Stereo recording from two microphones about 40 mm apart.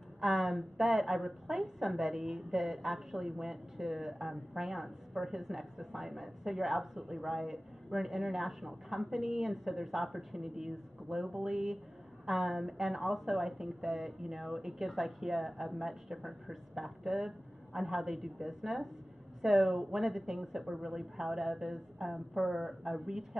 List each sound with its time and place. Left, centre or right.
0.2 s a woman's voice: centre